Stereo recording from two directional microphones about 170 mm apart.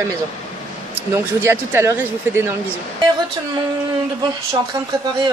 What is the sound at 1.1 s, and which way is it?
Speech, 15° right (ahead or behind).